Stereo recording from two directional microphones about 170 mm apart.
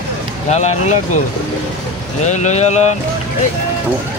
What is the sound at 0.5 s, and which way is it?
Speech, 40° left (ahead or behind).